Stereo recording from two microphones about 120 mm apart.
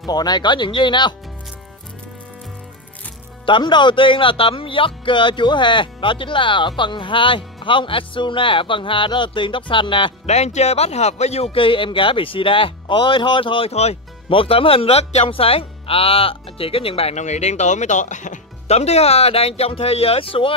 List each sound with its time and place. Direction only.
0.0 s speech: 35° left (ahead or behind)
3.4 s speech: 40° left (ahead or behind)
10.2 s speech: 70° left (ahead or behind); by 20.5 s 50° left (ahead or behind)